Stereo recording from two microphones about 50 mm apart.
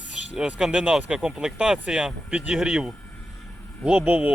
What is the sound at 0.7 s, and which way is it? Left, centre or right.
Speech, right.